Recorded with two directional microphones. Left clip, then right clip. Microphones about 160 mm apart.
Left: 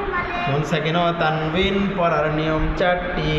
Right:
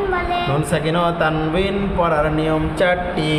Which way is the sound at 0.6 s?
30° right (ahead or behind).